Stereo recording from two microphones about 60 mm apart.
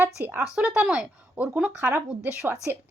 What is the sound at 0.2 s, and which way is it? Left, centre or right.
Speech, right.